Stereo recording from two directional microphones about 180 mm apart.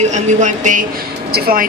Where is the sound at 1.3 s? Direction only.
55° right (ahead or behind).